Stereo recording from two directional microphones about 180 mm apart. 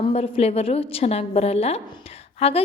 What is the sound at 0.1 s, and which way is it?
A woman's voice, 35° left (ahead or behind).